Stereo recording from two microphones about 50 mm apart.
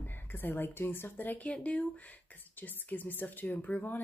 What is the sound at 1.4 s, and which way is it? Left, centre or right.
Speech, left.